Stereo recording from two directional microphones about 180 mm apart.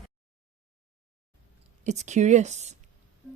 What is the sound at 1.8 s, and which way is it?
Speech, 40° right (ahead or behind).